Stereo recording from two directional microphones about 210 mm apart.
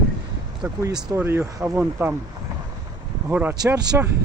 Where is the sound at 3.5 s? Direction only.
20° right (ahead or behind).